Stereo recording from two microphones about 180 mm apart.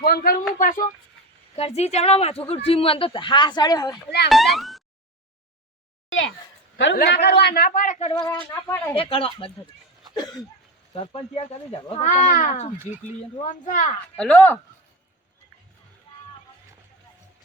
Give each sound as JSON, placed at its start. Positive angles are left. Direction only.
{"t": 0.0, "sound": "speech", "side_deg": 55}
{"t": 1.5, "sound": "speech", "side_deg": 35}
{"t": 4.3, "sound": "speech", "side_deg": 0}
{"t": 6.9, "sound": "speech", "side_deg": 65}
{"t": 8.3, "sound": "speech", "side_deg": 10}
{"t": 9.0, "sound": "speech", "side_deg": 30}
{"t": 10.9, "sound": "speech", "side_deg": 30}
{"t": 14.2, "sound": "speech", "side_deg": 10}